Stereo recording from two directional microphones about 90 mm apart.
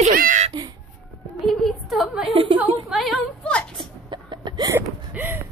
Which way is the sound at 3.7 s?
60° right (ahead or behind).